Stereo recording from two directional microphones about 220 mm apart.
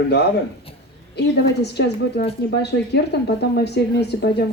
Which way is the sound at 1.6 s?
50° left (ahead or behind).